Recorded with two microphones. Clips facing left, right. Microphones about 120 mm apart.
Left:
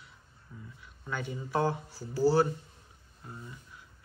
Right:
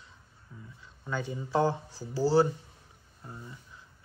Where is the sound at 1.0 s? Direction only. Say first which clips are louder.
Right 2 dB; 20° right (ahead or behind).